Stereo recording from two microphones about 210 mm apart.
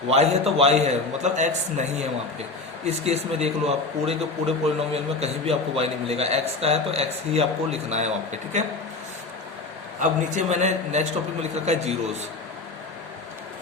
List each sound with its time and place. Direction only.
0.1 s a man's voice: 30° right (ahead or behind)
10.0 s a man's voice: 35° right (ahead or behind)